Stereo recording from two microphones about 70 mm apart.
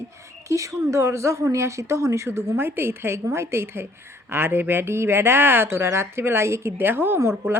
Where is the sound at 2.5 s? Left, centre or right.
Right.